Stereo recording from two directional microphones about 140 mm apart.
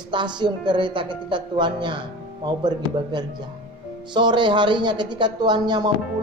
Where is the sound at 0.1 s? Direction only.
35° right (ahead or behind).